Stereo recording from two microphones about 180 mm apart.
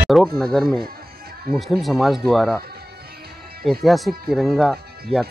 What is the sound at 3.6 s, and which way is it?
Speech, centre (ahead or behind).